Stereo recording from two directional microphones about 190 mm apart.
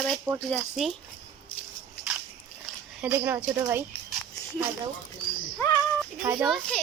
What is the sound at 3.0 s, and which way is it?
Speech, 10° right (ahead or behind).